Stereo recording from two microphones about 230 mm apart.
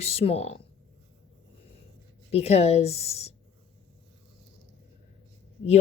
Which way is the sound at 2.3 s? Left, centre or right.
Left.